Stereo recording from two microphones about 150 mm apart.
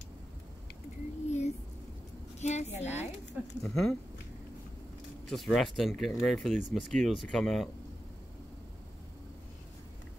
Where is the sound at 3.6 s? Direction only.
5° left (ahead or behind).